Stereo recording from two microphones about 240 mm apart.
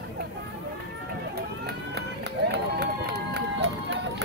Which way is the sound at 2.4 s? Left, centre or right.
Right.